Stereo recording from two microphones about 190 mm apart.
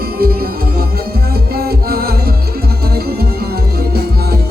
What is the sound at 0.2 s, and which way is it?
Music, 50° right (ahead or behind).